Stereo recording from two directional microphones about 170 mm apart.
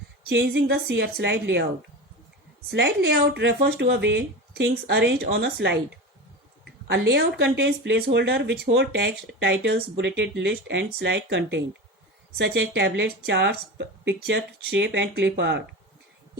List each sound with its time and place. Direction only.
0.3 s speech: 90° right
2.6 s speech: 85° right
6.8 s speech: 75° right (ahead or behind)